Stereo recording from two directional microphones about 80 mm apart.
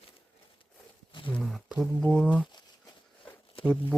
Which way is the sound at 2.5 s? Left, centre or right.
Left.